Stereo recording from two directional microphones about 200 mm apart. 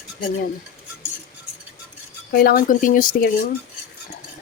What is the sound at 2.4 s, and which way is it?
Speech, 50° left (ahead or behind).